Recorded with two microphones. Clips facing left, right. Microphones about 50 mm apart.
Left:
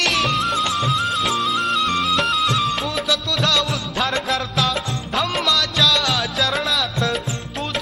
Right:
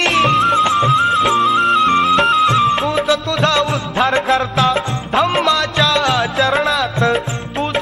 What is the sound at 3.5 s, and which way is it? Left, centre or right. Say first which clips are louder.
Music: right 5 dB; right.